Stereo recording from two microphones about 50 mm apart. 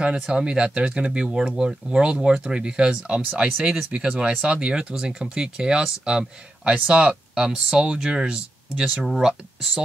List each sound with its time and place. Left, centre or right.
0.0 s speech: centre
9.0 s speech: centre